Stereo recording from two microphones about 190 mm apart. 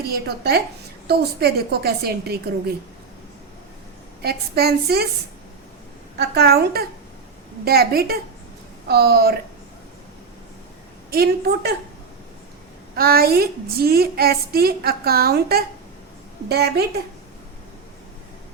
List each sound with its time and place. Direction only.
0.0 s a woman's voice: 55° right (ahead or behind)
4.2 s a woman's voice: 55° right (ahead or behind)
6.1 s a woman's voice: 60° right (ahead or behind)
11.1 s a woman's voice: 55° right (ahead or behind)
13.0 s a woman's voice: 50° right (ahead or behind)